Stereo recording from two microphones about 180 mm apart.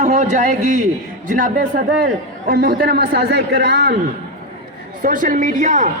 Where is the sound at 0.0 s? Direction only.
40° right (ahead or behind); by 3.9 s 70° right (ahead or behind).